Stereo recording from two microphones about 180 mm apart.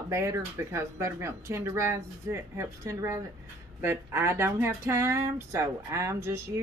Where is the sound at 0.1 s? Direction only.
15° right (ahead or behind).